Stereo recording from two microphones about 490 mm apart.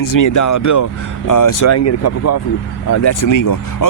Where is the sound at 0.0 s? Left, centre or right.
Left.